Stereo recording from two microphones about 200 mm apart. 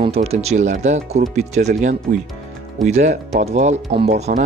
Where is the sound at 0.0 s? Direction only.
30° right (ahead or behind).